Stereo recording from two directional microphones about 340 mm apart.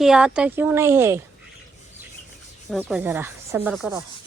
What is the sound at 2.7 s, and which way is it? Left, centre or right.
Rub, centre.